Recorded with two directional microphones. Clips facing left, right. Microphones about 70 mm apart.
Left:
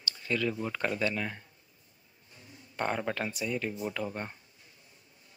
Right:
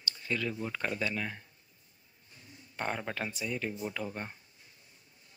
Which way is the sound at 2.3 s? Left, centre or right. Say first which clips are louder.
Left 2 dB; left.